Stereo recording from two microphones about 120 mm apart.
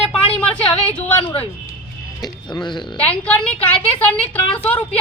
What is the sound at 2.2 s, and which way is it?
Speech, 40° left (ahead or behind).